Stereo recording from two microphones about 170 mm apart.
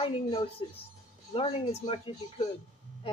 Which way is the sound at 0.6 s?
30° left (ahead or behind).